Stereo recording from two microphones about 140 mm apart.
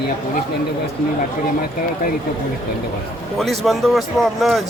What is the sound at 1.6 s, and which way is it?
Speech, 90° left.